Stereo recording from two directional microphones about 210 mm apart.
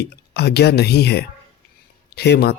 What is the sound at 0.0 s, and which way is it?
Mantra, 50° left (ahead or behind).